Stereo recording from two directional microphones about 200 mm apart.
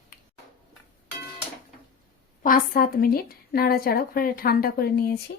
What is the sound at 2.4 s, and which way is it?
A woman's voice, 45° left (ahead or behind).